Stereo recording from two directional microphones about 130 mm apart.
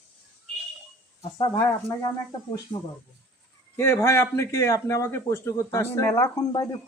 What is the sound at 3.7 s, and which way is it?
A man's voice, 20° left (ahead or behind).